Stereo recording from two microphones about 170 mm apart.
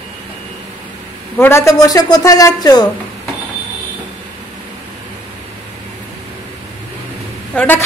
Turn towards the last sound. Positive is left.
turn(degrees=10)  # may be behind; listen again after turning